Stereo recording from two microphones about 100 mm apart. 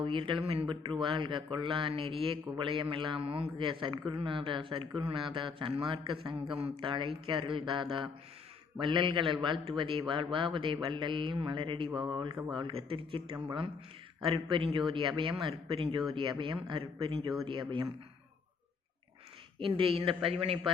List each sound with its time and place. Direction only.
0.0 s a man's voice: 60° right (ahead or behind)
12.1 s speech: 45° right (ahead or behind)
12.7 s a man's voice: 60° right (ahead or behind)
19.5 s a man's voice: 60° right (ahead or behind)